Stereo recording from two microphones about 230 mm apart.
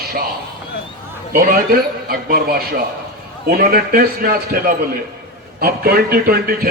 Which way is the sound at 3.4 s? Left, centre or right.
Right.